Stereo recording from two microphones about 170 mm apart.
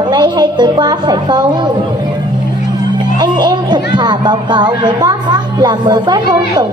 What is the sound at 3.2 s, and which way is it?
Speech, 25° right (ahead or behind).